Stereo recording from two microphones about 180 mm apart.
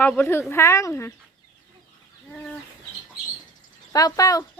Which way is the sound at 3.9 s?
20° left (ahead or behind).